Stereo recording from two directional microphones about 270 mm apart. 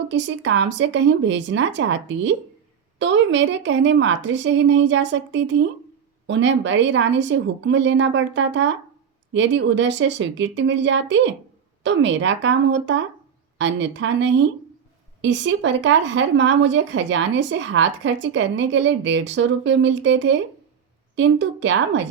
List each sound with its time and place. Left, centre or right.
0.1 s speech: right